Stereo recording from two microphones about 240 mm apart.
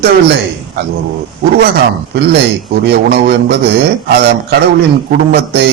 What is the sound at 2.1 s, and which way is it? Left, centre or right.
A man's voice, right.